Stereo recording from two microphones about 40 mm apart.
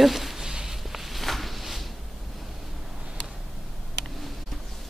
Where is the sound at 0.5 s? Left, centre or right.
Centre.